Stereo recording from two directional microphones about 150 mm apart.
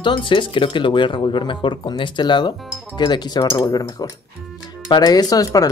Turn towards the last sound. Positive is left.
turn(degrees=25)  # may be behind; listen again after turning